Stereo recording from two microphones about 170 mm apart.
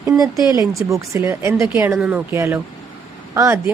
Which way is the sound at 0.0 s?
20° right (ahead or behind).